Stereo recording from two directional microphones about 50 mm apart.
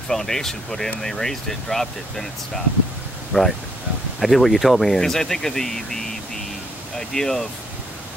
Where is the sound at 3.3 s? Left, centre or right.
Centre.